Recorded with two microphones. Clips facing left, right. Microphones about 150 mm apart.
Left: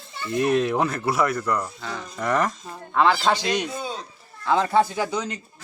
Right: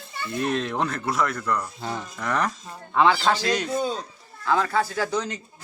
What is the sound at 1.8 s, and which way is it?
Speech, 25° right (ahead or behind).